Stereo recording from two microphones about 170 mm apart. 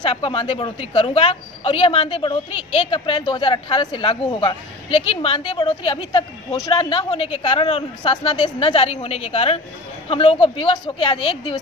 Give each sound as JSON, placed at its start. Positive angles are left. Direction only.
{"t": 0.0, "sound": "a woman's voice", "side_deg": 30}